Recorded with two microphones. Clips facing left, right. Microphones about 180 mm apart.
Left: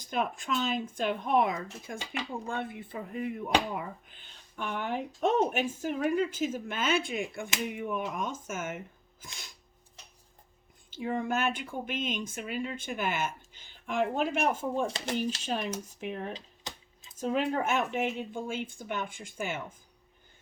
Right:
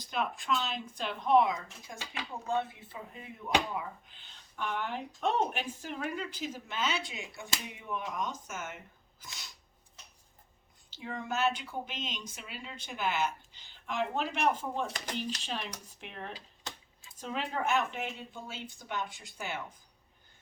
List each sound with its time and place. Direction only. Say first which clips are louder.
0.0 s speech: left 3 dB; 45° left (ahead or behind)
10.9 s speech: left 6 dB; 55° left (ahead or behind)
16.3 s a sound: left 3 dB; 20° left (ahead or behind)
17.2 s speech: left 7 dB; 45° left (ahead or behind)